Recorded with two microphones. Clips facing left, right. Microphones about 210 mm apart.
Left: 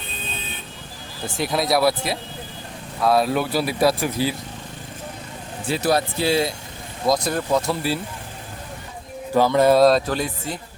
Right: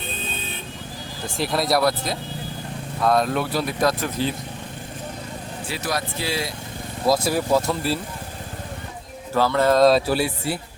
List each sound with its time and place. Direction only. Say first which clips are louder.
1.4 s speech: left 1 dB; centre (ahead or behind)
5.7 s speech: left 7 dB; 30° left (ahead or behind)
7.1 s speech: right 1 dB; 5° right (ahead or behind)
9.3 s music: left 3 dB; 15° left (ahead or behind)
9.8 s speech: even; 5° right (ahead or behind)